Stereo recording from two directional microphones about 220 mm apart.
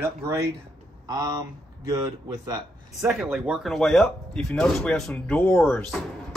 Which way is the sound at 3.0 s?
Centre (ahead or behind).